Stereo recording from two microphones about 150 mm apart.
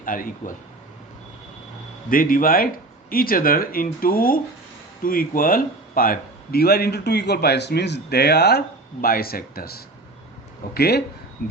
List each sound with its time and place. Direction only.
0.0 s speech: 65° left (ahead or behind)
2.0 s a man's voice: 70° left (ahead or behind); by 11.0 s 90° left